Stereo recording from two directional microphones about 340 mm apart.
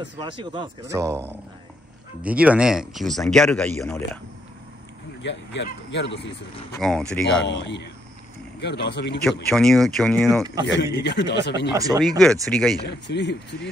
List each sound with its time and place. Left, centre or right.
0.2 s speech: centre
5.2 s speech: left
6.8 s speech: centre
7.4 s speech: left
9.2 s speech: centre
11.0 s speech: left
11.7 s speech: centre
12.2 s speech: centre
12.8 s speech: left